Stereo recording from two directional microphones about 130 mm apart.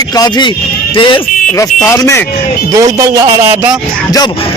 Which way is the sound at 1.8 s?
25° left (ahead or behind).